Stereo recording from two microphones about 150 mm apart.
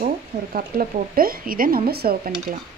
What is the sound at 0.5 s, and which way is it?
Speech, 75° right (ahead or behind).